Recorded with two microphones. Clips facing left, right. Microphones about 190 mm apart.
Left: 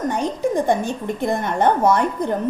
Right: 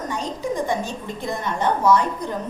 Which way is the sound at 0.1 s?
55° left (ahead or behind).